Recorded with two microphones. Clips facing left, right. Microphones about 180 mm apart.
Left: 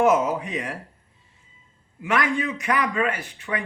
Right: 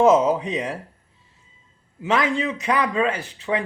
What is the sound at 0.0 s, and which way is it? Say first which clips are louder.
Speech: right 4 dB; 20° right (ahead or behind).